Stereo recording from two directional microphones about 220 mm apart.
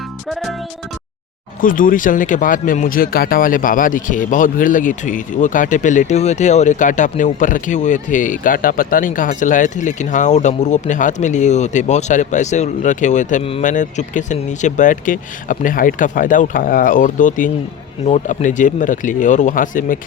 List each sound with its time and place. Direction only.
1.6 s speech: 40° left (ahead or behind)